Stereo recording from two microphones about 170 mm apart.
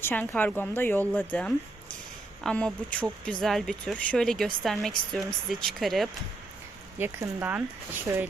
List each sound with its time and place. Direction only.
0.0 s speech: 10° left (ahead or behind)
7.0 s speech: 15° right (ahead or behind)